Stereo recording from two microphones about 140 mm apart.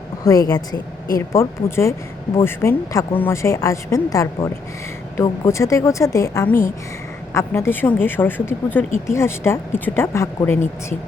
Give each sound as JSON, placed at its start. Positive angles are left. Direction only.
{"t": 0.3, "sound": "speech", "side_deg": 25}